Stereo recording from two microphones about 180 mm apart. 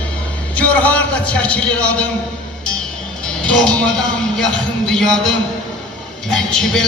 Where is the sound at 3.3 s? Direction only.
5° left (ahead or behind).